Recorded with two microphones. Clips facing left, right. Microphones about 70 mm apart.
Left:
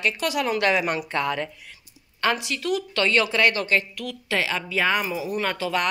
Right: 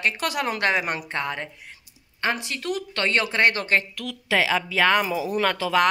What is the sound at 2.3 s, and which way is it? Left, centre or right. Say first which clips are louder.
A woman's voice: left 2 dB; right.